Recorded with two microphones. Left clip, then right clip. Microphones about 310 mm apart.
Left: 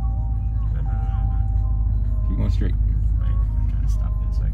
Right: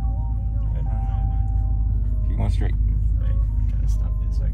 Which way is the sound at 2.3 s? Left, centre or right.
Right.